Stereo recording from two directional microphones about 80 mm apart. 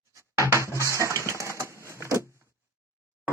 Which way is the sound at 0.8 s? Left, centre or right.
Left.